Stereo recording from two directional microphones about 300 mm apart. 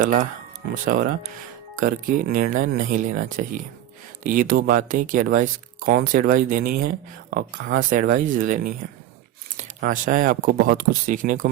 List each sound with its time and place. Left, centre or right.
0.0 s speech: right